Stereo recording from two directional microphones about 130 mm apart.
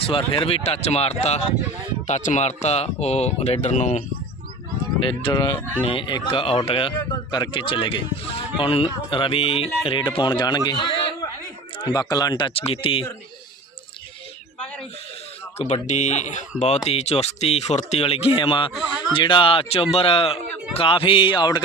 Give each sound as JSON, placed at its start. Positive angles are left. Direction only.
{"t": 0.0, "sound": "speech", "side_deg": 45}
{"t": 2.0, "sound": "speech", "side_deg": 65}
{"t": 5.3, "sound": "speech", "side_deg": 25}
{"t": 5.8, "sound": "a man's voice", "side_deg": 40}
{"t": 15.5, "sound": "a man's voice", "side_deg": 60}